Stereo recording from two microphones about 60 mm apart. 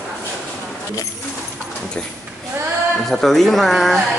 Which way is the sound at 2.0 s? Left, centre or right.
Centre.